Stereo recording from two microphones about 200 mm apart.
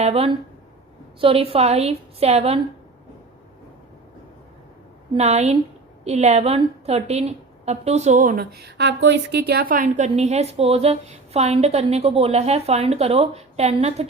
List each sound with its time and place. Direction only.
0.0 s a woman's voice: 30° right (ahead or behind)
5.1 s a woman's voice: 30° right (ahead or behind)